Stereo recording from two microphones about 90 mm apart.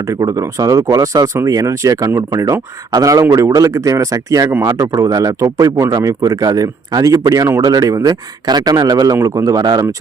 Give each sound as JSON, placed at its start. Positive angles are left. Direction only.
{"t": 0.1, "sound": "speech", "side_deg": -35}